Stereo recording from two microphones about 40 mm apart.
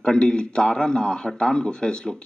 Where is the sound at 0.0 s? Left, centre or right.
Centre.